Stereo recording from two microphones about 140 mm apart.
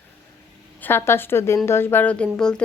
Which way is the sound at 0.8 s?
15° left (ahead or behind).